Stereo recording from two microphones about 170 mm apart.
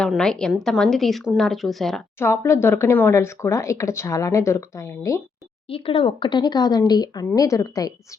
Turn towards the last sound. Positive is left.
turn(degrees=20)  # may be behind; listen again after turning